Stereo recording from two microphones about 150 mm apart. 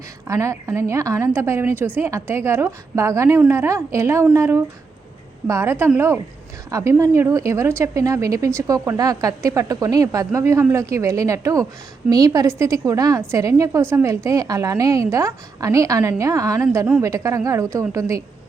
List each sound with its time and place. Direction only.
0.3 s a woman's voice: 20° right (ahead or behind)